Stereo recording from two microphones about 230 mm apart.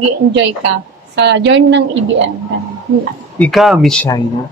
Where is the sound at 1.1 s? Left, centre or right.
Right.